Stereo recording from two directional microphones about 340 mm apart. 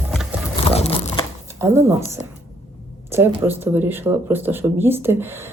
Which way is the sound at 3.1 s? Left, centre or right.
Centre.